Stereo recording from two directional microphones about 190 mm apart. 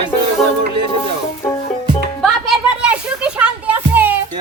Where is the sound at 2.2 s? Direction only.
5° right (ahead or behind).